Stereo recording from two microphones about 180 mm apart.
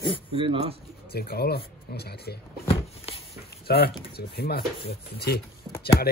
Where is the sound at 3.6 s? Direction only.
60° left (ahead or behind).